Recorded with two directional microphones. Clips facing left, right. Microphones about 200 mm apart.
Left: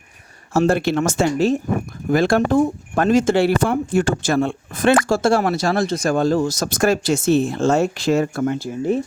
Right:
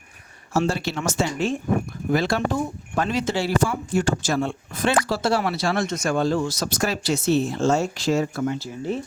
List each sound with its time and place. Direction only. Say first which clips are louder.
0.5 s speech: left 7 dB; 55° left (ahead or behind)